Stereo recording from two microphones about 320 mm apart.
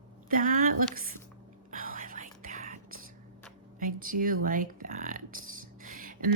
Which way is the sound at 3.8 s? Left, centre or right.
Right.